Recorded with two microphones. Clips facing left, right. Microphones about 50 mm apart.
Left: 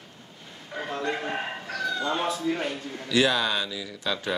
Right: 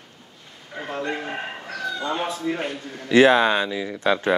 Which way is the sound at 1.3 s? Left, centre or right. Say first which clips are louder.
Even; centre.